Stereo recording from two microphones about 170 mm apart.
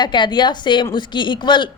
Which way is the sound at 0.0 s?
25° left (ahead or behind).